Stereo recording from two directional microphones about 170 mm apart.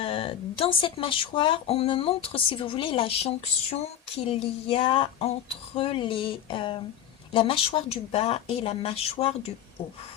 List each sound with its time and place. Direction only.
0.0 s speech: 35° left (ahead or behind)